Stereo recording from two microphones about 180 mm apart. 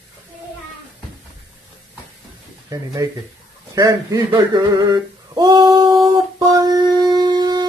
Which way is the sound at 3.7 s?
20° right (ahead or behind).